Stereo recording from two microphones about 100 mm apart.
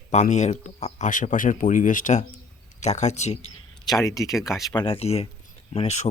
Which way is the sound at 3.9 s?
35° left (ahead or behind).